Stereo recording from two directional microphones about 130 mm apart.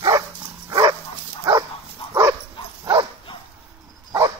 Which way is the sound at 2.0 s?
45° left (ahead or behind).